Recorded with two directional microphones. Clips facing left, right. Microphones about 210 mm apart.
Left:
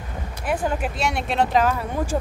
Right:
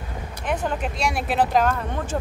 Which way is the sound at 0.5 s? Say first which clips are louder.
Left 1 dB; 5° left (ahead or behind).